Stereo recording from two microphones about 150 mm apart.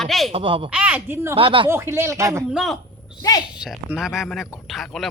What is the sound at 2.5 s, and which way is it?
Speech, 5° right (ahead or behind).